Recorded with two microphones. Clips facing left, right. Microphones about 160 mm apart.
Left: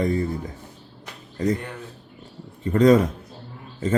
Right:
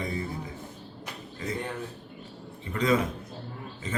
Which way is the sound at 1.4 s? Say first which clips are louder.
Left 12 dB; 40° left (ahead or behind).